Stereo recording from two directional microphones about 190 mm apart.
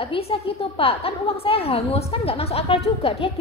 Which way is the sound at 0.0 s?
30° left (ahead or behind).